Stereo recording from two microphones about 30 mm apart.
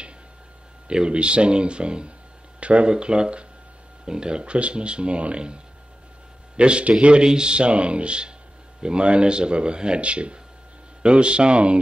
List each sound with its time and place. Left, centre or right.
0.8 s speech: right
2.9 s a man's voice: right
7.2 s speech: right